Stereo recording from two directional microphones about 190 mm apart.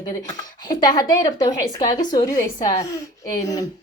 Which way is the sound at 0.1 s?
20° left (ahead or behind).